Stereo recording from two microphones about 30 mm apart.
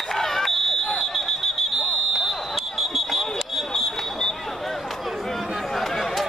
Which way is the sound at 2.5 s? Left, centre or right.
Centre.